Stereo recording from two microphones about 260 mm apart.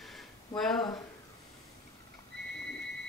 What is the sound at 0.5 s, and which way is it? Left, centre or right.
Speech, centre.